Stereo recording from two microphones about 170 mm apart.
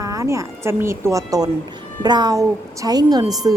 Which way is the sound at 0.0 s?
20° right (ahead or behind).